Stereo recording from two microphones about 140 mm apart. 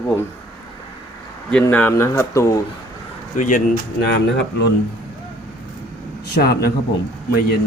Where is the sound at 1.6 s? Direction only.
15° left (ahead or behind).